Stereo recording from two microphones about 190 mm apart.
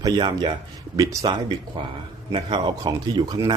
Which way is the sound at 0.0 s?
25° right (ahead or behind).